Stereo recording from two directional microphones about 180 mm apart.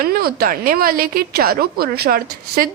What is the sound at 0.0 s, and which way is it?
A woman's voice, 55° right (ahead or behind).